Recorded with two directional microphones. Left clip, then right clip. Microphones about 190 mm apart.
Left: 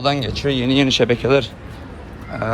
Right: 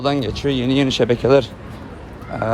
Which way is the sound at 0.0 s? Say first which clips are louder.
Even; 15° right (ahead or behind).